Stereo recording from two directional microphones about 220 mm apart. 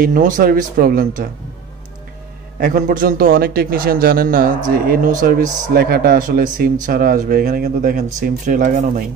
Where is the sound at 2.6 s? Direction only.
40° right (ahead or behind).